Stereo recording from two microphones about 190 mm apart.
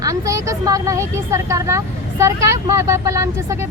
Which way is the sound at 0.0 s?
15° right (ahead or behind).